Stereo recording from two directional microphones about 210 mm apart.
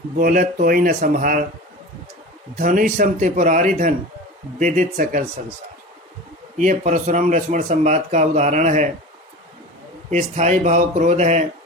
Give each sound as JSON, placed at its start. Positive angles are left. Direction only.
{"t": 0.2, "sound": "speech", "side_deg": -40}
{"t": 2.6, "sound": "speech", "side_deg": -40}
{"t": 6.6, "sound": "speech", "side_deg": -35}
{"t": 10.1, "sound": "speech", "side_deg": -35}